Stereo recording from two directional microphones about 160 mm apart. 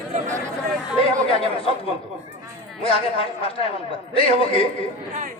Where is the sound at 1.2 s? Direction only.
35° left (ahead or behind).